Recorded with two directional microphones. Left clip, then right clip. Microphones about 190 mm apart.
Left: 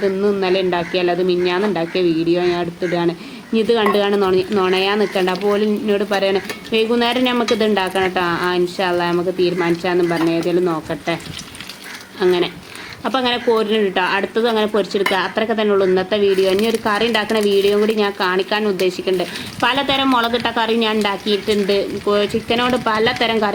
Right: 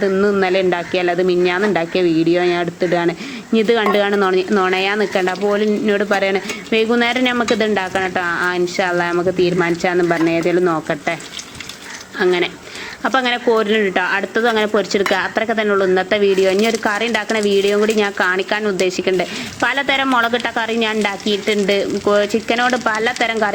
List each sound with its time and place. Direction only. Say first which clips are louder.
0.0 s a man's voice: right 2 dB; 25° right (ahead or behind)
12.2 s a man's voice: even; 25° right (ahead or behind)